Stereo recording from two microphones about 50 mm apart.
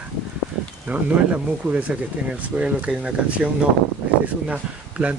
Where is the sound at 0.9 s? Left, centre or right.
Right.